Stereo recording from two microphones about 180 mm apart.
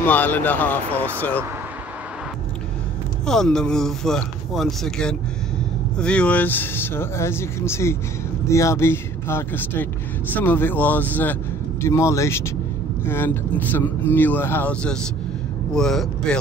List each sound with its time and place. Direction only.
0.0 s speech: 10° left (ahead or behind)
3.3 s speech: 5° left (ahead or behind)